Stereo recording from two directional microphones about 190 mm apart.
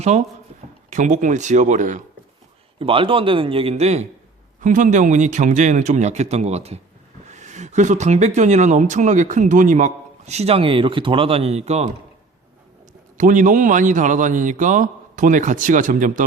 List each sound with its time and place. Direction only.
0.0 s speech: 35° right (ahead or behind)
2.7 s speech: 30° right (ahead or behind)
13.1 s a man's voice: 40° right (ahead or behind)